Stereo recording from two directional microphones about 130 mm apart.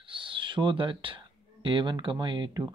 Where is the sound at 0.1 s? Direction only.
40° right (ahead or behind).